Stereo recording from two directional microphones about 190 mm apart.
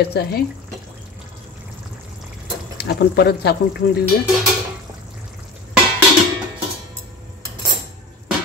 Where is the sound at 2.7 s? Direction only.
60° left (ahead or behind).